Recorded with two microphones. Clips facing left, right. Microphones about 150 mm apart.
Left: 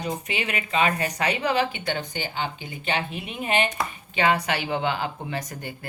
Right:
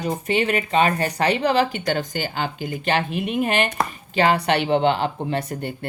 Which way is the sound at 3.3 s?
55° right (ahead or behind).